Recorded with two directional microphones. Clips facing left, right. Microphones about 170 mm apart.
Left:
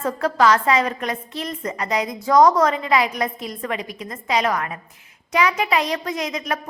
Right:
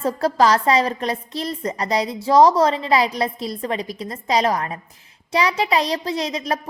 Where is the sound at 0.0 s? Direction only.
35° right (ahead or behind).